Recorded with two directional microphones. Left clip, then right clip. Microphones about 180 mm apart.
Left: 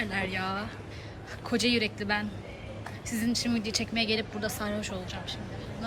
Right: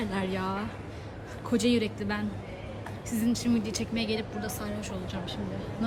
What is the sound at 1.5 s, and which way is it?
Speech, 15° right (ahead or behind).